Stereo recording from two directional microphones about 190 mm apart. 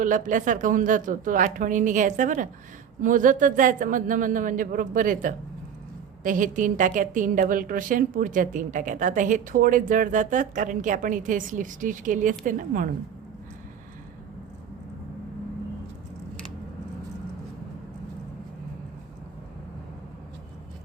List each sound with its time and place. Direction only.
0.0 s a woman's voice: 45° right (ahead or behind)